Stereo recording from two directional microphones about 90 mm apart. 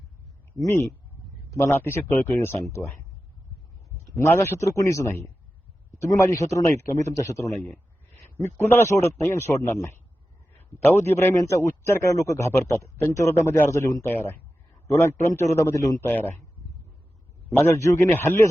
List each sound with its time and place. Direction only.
0.7 s a man's voice: 25° left (ahead or behind)
3.9 s a man's voice: 35° left (ahead or behind)
7.6 s a sound: 20° left (ahead or behind)
8.4 s a man's voice: 25° left (ahead or behind)
16.0 s speech: 25° left (ahead or behind)
17.6 s a man's voice: 30° left (ahead or behind)